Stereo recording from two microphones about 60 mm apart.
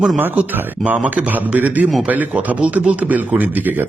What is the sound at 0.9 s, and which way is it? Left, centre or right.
Speech, right.